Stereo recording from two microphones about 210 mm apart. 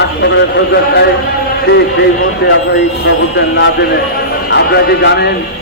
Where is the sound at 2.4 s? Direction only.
50° left (ahead or behind).